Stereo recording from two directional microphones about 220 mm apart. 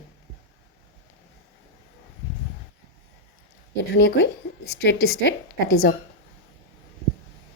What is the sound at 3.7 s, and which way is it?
A woman's voice, 50° left (ahead or behind).